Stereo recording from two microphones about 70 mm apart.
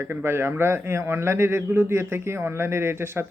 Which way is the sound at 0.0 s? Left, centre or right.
Right.